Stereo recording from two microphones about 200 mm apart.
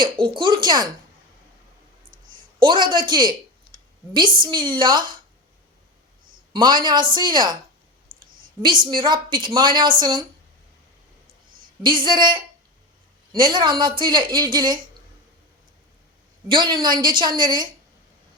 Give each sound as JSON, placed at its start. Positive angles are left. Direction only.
{"t": 0.0, "sound": "a sound", "side_deg": -25}
{"t": 2.6, "sound": "a woman's voice", "side_deg": -25}
{"t": 4.4, "sound": "a woman's voice", "side_deg": -25}
{"t": 6.5, "sound": "a woman's voice", "side_deg": -20}
{"t": 8.0, "sound": "clicking", "side_deg": -45}
{"t": 8.9, "sound": "a woman's voice", "side_deg": -25}
{"t": 11.8, "sound": "a woman's voice", "side_deg": -25}
{"t": 16.5, "sound": "a woman's voice", "side_deg": -25}